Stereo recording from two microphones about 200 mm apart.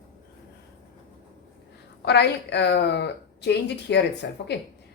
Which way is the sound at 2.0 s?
60° left (ahead or behind).